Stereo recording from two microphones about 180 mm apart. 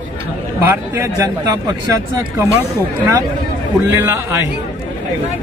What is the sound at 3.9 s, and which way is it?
Speech, 15° right (ahead or behind).